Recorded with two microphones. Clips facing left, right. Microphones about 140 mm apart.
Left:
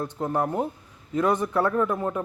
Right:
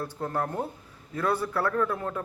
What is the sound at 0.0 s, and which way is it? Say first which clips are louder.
Speech: left 4 dB; 20° left (ahead or behind).